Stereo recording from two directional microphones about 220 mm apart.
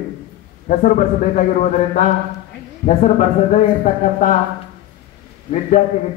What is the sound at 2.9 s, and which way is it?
Speech, 35° left (ahead or behind).